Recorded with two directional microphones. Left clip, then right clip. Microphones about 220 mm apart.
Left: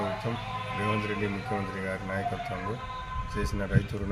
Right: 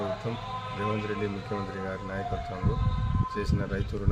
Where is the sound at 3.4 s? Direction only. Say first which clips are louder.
Left 4 dB; 20° right (ahead or behind).